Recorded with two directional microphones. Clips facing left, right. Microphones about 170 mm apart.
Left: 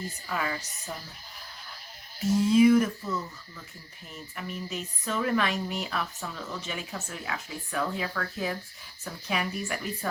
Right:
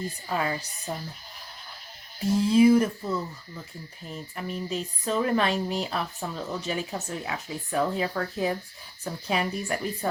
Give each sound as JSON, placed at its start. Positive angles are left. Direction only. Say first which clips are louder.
{"t": 0.3, "sound": "speech", "louder": "right 3 dB", "side_deg": -30}
{"t": 2.5, "sound": "speech", "louder": "right 1 dB", "side_deg": -30}